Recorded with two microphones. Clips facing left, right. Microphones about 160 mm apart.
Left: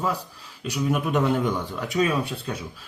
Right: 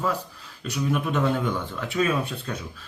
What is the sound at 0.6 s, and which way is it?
Speech, 15° left (ahead or behind).